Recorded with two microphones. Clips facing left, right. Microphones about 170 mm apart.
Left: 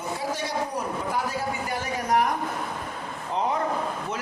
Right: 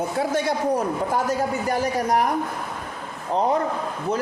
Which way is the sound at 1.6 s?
35° right (ahead or behind).